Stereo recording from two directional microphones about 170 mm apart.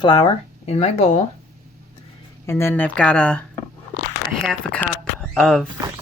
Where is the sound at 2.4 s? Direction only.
15° left (ahead or behind).